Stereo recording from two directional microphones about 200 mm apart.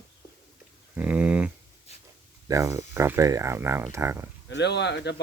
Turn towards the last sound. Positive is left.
turn(degrees=60)  # may be behind; listen again after turning